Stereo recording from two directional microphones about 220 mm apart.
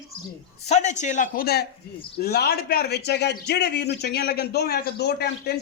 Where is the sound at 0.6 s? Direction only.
30° left (ahead or behind).